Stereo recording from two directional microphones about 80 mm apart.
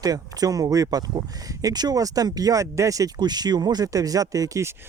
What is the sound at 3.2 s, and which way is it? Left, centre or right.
Speech, right.